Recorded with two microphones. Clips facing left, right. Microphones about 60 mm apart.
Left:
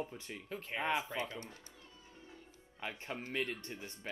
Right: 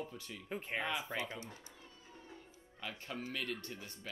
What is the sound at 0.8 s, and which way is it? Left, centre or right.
Speech, left.